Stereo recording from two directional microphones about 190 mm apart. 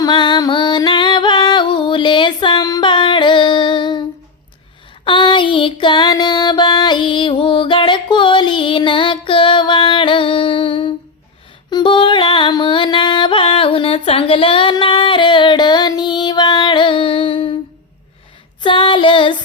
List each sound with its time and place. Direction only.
0.0 s music: 25° left (ahead or behind)
5.0 s a sound: 25° left (ahead or behind)
11.7 s music: 25° left (ahead or behind)
18.6 s female singing: 25° left (ahead or behind)